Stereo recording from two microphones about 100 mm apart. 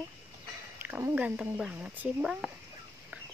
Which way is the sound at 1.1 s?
10° right (ahead or behind).